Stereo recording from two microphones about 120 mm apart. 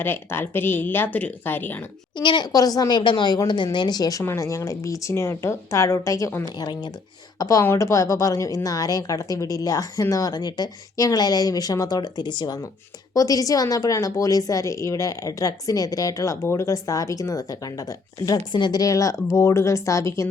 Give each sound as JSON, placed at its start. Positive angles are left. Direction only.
{"t": 0.0, "sound": "a woman's voice", "side_deg": 20}
{"t": 2.1, "sound": "a woman's voice", "side_deg": 40}
{"t": 4.2, "sound": "a woman's voice", "side_deg": 25}